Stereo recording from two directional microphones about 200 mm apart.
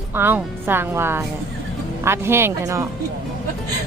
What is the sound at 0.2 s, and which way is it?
Speech, 10° right (ahead or behind).